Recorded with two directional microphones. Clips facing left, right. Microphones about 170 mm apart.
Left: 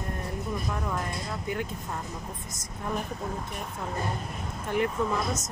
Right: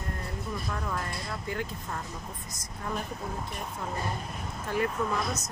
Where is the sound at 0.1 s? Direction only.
15° left (ahead or behind).